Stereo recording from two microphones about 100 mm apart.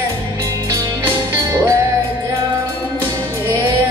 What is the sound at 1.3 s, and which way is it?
Music, 30° right (ahead or behind).